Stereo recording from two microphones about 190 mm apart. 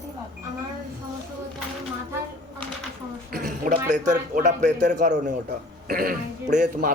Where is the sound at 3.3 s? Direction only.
50° right (ahead or behind).